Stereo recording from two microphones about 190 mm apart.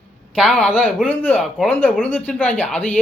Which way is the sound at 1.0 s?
10° left (ahead or behind).